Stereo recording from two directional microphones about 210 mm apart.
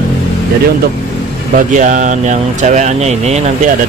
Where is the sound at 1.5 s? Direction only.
35° right (ahead or behind).